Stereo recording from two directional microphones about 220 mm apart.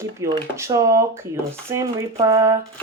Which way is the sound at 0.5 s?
15° right (ahead or behind).